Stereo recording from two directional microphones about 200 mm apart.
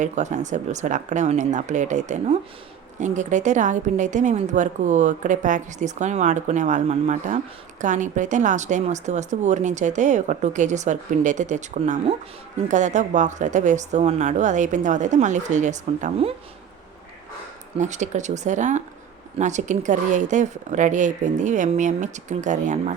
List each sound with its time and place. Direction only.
0.0 s a woman's voice: 35° right (ahead or behind)
17.7 s a woman's voice: 35° right (ahead or behind)